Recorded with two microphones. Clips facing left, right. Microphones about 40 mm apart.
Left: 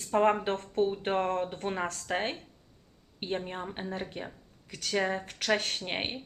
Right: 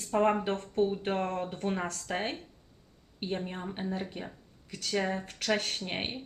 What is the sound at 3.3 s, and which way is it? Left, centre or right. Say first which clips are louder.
Speech: left 2 dB; centre.